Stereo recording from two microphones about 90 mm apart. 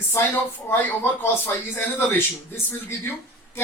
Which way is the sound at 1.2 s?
25° left (ahead or behind).